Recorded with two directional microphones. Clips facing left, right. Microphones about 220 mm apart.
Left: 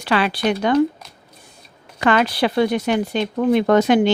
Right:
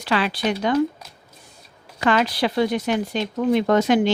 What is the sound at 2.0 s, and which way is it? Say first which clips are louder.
A woman's voice: left 2 dB; 60° left (ahead or behind).